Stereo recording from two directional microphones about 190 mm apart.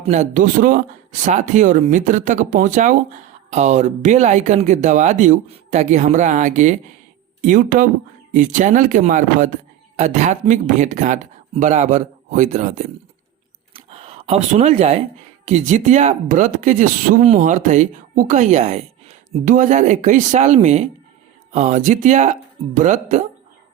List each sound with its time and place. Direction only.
0.0 s speech: 35° right (ahead or behind)
13.7 s a sound: 30° right (ahead or behind)
15.4 s speech: 35° right (ahead or behind)